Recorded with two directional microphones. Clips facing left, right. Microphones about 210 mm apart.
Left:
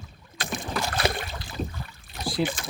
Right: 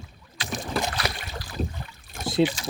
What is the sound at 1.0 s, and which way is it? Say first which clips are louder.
Boat: left 5 dB; 25° left (ahead or behind).